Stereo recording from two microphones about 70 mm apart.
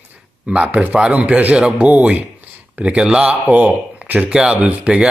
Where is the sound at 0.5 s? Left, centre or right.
Centre.